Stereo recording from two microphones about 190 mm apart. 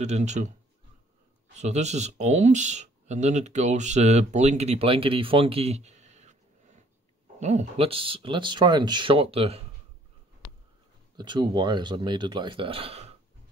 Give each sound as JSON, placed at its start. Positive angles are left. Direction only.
{"t": 0.0, "sound": "speech", "side_deg": -35}
{"t": 1.6, "sound": "speech", "side_deg": -35}
{"t": 11.1, "sound": "speech", "side_deg": -25}